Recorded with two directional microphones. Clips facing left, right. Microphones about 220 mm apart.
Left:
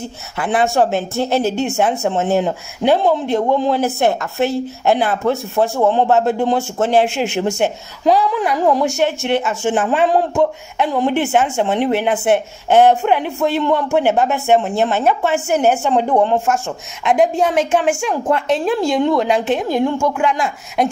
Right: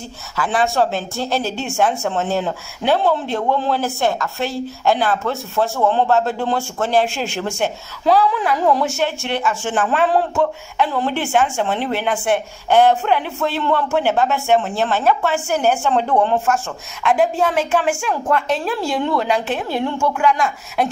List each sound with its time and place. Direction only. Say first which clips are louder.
0.4 s a woman's voice: left 2 dB; 20° left (ahead or behind)